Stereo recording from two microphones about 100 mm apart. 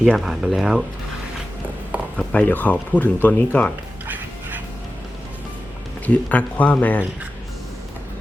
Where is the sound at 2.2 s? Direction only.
15° left (ahead or behind).